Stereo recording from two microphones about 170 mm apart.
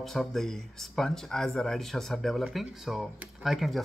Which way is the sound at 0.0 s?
Centre (ahead or behind).